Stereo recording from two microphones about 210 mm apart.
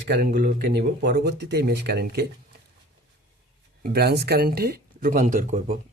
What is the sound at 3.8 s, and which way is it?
A man's voice, 50° right (ahead or behind).